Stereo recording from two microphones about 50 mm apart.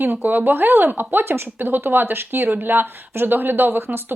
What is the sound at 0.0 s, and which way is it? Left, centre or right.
Speech, right.